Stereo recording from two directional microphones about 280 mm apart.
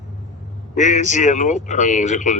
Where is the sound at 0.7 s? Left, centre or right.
Left.